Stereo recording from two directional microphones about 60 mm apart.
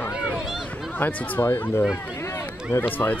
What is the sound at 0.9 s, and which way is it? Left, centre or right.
Speech, left.